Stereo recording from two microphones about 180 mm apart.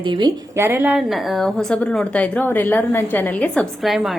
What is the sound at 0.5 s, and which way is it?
A woman's voice, 15° right (ahead or behind).